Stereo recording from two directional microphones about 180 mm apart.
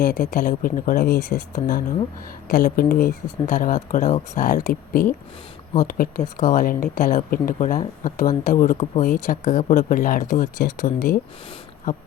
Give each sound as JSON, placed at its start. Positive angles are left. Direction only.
{"t": 0.0, "sound": "speech", "side_deg": 50}